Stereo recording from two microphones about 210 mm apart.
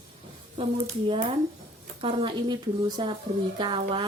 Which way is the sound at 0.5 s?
25° right (ahead or behind).